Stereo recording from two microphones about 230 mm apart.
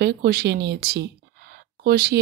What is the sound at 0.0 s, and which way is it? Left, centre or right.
Speech, right.